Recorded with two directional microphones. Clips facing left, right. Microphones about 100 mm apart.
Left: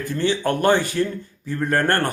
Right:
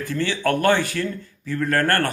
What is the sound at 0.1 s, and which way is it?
A man's voice, 20° left (ahead or behind).